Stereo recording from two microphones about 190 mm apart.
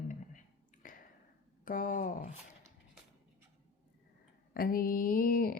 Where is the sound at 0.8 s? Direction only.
45° left (ahead or behind).